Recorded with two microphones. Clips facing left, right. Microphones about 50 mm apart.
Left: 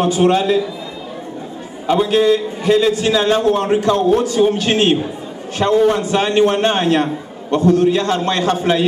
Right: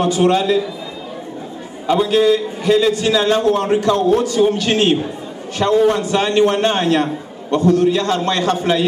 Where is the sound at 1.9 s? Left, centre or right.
Centre.